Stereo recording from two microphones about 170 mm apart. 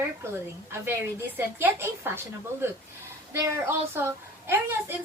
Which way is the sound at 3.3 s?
15° right (ahead or behind).